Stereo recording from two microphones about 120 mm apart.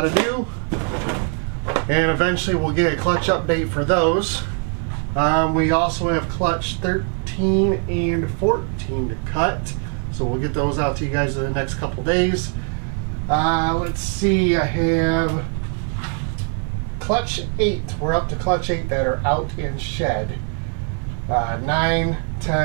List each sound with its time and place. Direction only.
0.0 s drawer open or close: 15° right (ahead or behind)
1.7 s speech: 15° right (ahead or behind)
8.1 s speech: 15° right (ahead or behind)
17.1 s speech: 15° right (ahead or behind)
21.3 s speech: 15° right (ahead or behind)